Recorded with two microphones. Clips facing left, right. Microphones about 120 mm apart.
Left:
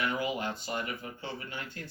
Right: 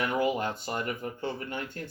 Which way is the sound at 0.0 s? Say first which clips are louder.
Right 4 dB; 45° right (ahead or behind).